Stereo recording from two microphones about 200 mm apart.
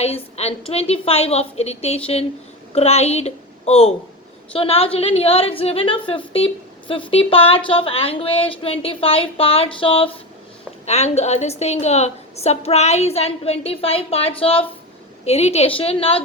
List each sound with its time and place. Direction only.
0.0 s a woman's voice: 30° left (ahead or behind)